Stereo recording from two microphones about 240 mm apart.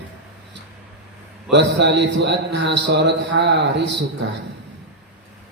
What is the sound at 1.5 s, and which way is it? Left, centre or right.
Speech, right.